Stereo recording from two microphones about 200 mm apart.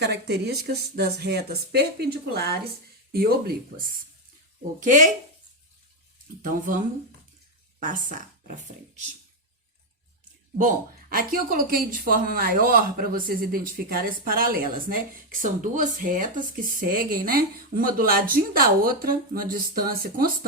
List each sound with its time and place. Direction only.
0.0 s speech: 55° right (ahead or behind)
4.8 s speech: 40° right (ahead or behind)
6.4 s speech: 40° right (ahead or behind)
7.8 s speech: 40° right (ahead or behind)
11.1 s speech: 45° right (ahead or behind)